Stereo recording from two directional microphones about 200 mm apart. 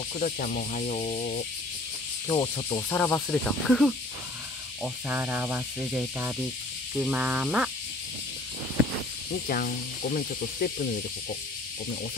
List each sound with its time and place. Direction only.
0.2 s rub: 40° left (ahead or behind)
2.2 s insect: 20° left (ahead or behind)
2.9 s speech: 10° left (ahead or behind)
4.8 s speech: 10° right (ahead or behind)
9.3 s speech: 45° left (ahead or behind)